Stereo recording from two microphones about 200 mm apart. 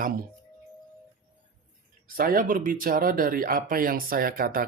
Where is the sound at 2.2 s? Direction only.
45° right (ahead or behind).